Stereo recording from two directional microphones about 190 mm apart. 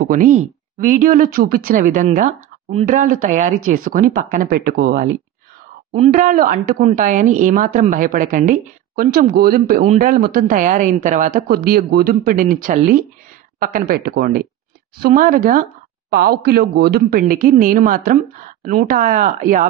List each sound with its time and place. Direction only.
0.0 s speech: 45° right (ahead or behind)